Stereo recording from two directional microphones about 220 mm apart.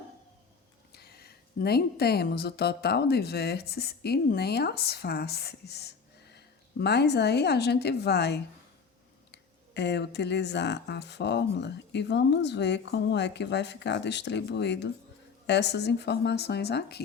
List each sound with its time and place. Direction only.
0.9 s a woman's voice: 45° left (ahead or behind)